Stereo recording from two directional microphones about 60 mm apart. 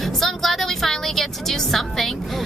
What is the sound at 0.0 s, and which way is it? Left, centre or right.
Vehicle, centre.